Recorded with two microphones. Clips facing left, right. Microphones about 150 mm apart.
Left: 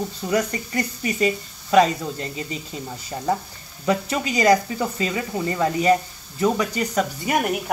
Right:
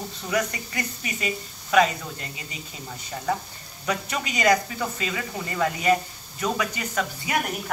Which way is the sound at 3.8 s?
30° left (ahead or behind).